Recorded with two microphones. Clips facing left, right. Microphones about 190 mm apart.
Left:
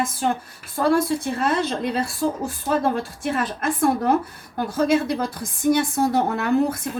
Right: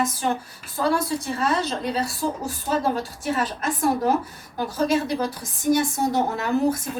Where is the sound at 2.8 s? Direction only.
55° left (ahead or behind).